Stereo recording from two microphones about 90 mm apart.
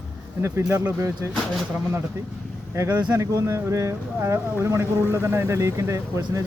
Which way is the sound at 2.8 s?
35° right (ahead or behind).